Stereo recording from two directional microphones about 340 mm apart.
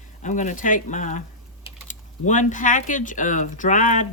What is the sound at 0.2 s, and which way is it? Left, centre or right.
Speech, left.